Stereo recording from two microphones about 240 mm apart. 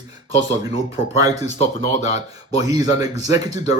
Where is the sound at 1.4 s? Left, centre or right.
Left.